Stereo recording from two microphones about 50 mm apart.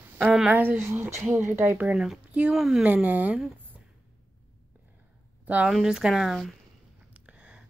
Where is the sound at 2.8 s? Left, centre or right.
Right.